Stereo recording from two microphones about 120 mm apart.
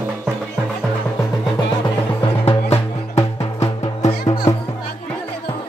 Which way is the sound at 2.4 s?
60° left (ahead or behind).